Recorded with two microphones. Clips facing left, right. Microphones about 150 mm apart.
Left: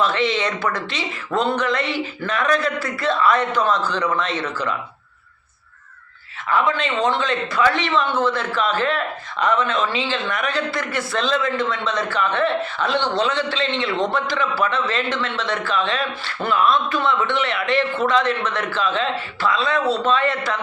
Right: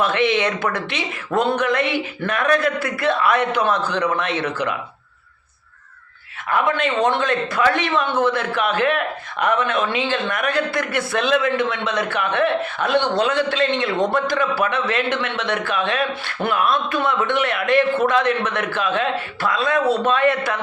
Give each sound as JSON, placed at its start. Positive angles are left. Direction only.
{"t": 0.0, "sound": "a man's voice", "side_deg": -55}
{"t": 6.5, "sound": "a man's voice", "side_deg": -55}